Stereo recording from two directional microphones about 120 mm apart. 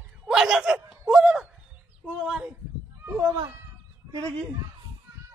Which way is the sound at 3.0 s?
15° right (ahead or behind).